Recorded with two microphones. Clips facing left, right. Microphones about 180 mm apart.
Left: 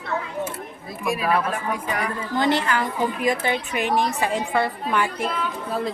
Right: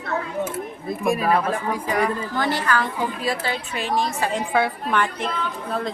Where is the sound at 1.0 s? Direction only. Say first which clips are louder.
Right 2 dB; 45° right (ahead or behind).